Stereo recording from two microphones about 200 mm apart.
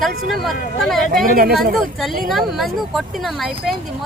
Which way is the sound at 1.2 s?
45° right (ahead or behind).